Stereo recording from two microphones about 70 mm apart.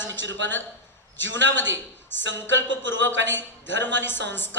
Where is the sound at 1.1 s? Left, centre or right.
Left.